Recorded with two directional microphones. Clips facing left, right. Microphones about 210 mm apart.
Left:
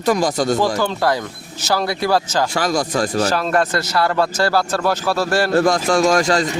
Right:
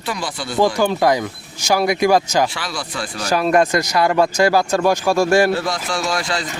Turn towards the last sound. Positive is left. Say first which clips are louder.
# left 7 dB
turn(degrees=45)  # may be behind; listen again after turning